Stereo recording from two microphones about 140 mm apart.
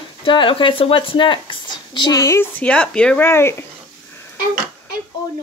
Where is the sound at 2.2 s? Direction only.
20° left (ahead or behind).